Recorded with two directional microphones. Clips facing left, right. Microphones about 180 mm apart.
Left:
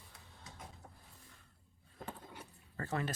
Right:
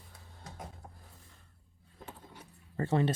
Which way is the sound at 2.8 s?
30° right (ahead or behind).